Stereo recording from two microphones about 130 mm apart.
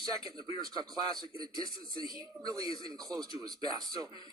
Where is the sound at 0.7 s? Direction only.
30° right (ahead or behind).